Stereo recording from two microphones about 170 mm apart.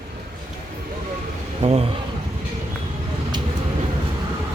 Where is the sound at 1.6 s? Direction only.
45° right (ahead or behind).